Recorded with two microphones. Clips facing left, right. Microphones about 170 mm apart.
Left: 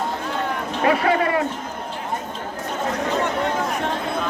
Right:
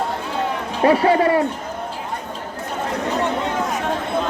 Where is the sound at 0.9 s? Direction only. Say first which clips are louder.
Right 4 dB; 35° right (ahead or behind).